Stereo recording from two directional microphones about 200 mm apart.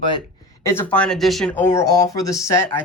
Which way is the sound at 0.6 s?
10° left (ahead or behind).